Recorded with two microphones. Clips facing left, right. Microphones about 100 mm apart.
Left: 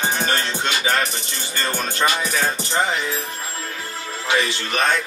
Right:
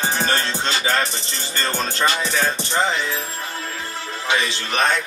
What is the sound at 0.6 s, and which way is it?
Music, 35° right (ahead or behind).